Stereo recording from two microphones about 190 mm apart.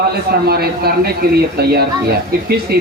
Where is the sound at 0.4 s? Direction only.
55° right (ahead or behind).